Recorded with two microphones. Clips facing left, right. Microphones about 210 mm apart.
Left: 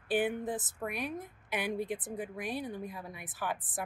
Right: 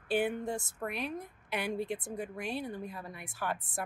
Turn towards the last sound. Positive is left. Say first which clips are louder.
# even
turn(degrees=0)  # may be behind; listen again after turning